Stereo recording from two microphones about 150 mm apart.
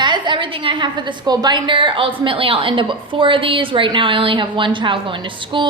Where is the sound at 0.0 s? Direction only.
30° right (ahead or behind).